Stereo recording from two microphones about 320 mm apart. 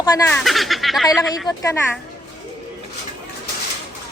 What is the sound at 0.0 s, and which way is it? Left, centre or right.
Speech, centre.